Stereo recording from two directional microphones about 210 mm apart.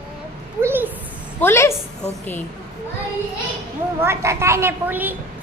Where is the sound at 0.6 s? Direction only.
10° right (ahead or behind).